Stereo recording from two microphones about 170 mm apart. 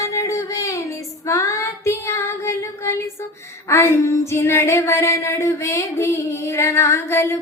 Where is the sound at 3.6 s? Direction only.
15° left (ahead or behind).